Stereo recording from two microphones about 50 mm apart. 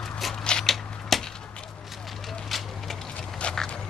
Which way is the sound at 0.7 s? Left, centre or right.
Centre.